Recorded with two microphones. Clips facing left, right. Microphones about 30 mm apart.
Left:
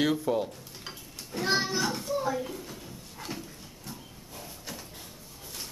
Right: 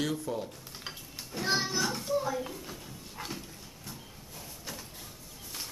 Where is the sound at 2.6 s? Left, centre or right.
Centre.